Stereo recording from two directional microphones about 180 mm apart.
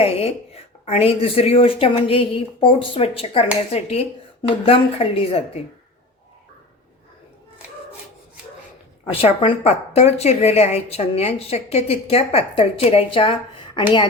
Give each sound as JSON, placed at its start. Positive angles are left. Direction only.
{"t": 0.0, "sound": "a woman's voice", "side_deg": 35}
{"t": 9.4, "sound": "a woman's voice", "side_deg": 30}